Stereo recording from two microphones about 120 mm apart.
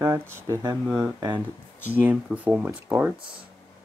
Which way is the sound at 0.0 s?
20° right (ahead or behind).